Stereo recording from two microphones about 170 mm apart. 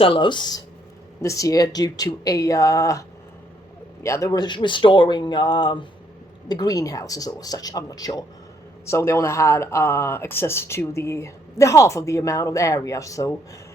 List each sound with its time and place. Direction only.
0.0 s speech: 30° left (ahead or behind)
4.0 s speech: 15° left (ahead or behind)